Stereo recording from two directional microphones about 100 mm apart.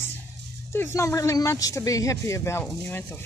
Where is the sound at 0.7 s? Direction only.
25° left (ahead or behind).